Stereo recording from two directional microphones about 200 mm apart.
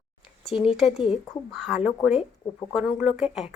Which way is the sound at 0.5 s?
30° left (ahead or behind).